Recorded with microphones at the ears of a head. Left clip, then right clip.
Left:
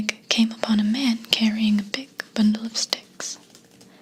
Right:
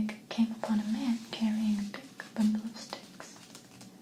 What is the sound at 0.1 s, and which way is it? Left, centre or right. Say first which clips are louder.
Whispering: left 12 dB; left.